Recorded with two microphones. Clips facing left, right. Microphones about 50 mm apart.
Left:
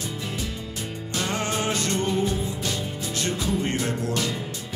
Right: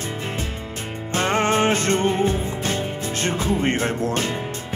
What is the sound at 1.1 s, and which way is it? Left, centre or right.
Music, right.